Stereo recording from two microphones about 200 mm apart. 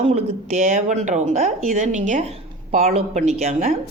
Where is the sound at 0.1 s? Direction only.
35° right (ahead or behind).